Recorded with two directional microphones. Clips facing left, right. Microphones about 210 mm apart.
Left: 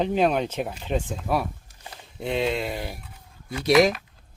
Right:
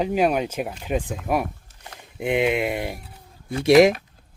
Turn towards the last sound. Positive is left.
turn(degrees=-25)  # may be behind; listen again after turning